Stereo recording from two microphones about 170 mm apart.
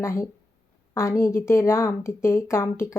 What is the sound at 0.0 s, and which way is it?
Speech, 15° left (ahead or behind).